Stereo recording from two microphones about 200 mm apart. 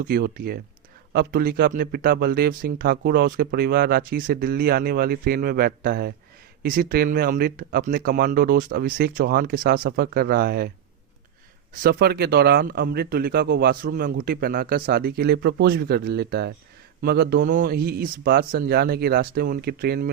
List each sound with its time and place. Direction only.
0.0 s speech: 45° right (ahead or behind)
11.8 s speech: 50° right (ahead or behind)